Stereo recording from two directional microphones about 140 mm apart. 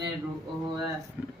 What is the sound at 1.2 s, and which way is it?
Speech, 10° right (ahead or behind).